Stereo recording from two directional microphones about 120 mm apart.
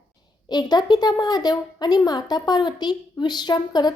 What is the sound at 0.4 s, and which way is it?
A woman's voice, 35° left (ahead or behind).